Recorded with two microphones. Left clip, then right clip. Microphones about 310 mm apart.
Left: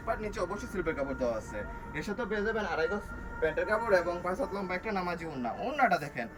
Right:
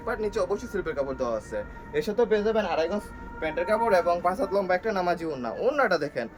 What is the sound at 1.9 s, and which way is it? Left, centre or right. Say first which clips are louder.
Speech: right 11 dB; right.